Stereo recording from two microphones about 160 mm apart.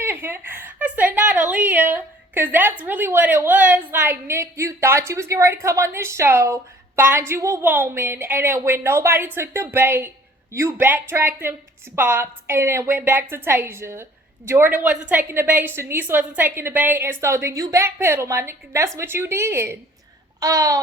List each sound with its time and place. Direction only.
0.0 s a woman's voice: 15° right (ahead or behind)
20.4 s babbling: 20° right (ahead or behind)